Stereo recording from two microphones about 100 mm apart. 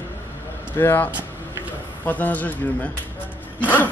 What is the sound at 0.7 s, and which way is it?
Speech, 20° left (ahead or behind).